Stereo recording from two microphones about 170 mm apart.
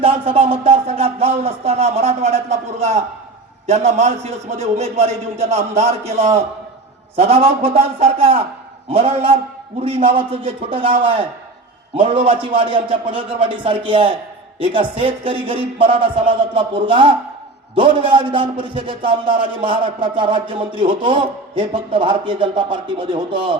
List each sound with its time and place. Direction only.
0.0 s a man's voice: 35° right (ahead or behind)